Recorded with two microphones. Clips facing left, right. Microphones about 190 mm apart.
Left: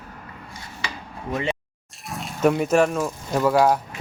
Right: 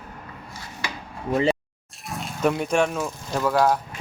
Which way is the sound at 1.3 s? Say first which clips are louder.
Right 5 dB; 35° right (ahead or behind).